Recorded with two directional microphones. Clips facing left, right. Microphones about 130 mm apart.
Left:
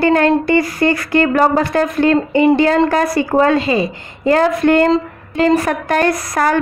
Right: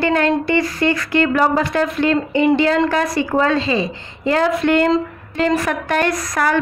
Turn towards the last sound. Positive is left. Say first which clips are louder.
# left 3 dB
turn(degrees=40)  # may be behind; listen again after turning